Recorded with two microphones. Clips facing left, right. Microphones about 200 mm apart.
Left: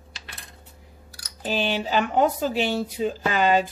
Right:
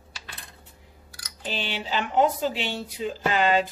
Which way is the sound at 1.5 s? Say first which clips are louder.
Left 6 dB; 45° left (ahead or behind).